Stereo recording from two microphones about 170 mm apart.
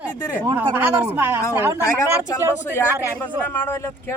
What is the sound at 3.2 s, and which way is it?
Speech, 10° left (ahead or behind).